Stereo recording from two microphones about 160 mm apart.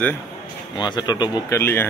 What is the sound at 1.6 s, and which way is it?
Speech, 15° left (ahead or behind).